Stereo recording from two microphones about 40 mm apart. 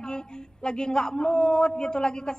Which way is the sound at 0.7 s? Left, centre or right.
Centre.